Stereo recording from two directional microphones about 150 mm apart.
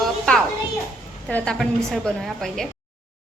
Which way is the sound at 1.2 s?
5° left (ahead or behind).